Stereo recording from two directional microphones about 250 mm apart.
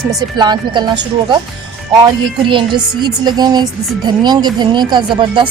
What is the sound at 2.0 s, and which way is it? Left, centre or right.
Speech, centre.